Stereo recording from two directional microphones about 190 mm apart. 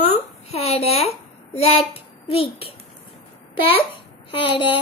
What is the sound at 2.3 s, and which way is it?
A child's voice, 30° left (ahead or behind).